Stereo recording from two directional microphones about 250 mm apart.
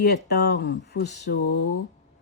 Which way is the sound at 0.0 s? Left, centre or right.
Left.